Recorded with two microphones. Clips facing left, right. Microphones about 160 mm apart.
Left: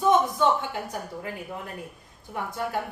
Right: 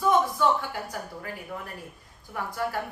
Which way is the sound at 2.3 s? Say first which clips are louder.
Even; 20° left (ahead or behind).